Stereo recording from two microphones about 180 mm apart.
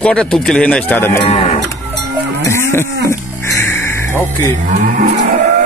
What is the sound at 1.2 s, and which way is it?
Speech, 35° left (ahead or behind).